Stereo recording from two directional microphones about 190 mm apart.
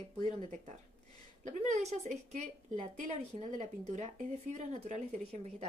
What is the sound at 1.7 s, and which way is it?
A woman's voice, 35° right (ahead or behind).